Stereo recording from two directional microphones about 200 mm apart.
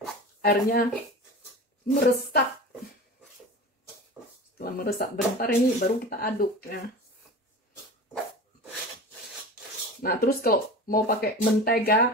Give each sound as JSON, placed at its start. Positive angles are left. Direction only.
{"t": 0.4, "sound": "speech", "side_deg": 50}
{"t": 2.0, "sound": "speech", "side_deg": 50}
{"t": 4.6, "sound": "speech", "side_deg": 50}
{"t": 10.0, "sound": "speech", "side_deg": 50}